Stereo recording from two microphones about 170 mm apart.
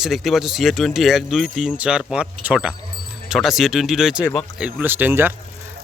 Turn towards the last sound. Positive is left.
turn(degrees=-10)  # may be behind; listen again after turning